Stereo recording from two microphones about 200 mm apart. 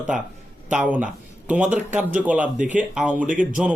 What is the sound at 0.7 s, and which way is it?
Speech, 5° right (ahead or behind).